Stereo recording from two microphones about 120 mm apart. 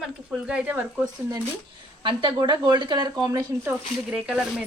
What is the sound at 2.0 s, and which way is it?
Speech, 45° right (ahead or behind).